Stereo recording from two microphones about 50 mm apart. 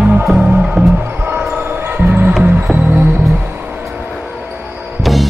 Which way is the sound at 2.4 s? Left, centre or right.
Right.